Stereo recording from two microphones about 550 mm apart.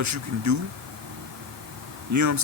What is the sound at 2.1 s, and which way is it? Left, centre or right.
Speech, right.